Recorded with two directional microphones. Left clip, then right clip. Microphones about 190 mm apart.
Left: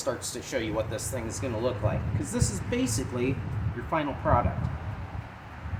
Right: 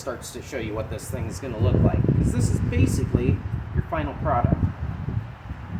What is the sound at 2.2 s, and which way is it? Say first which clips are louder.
Speech: right 4 dB; 20° left (ahead or behind).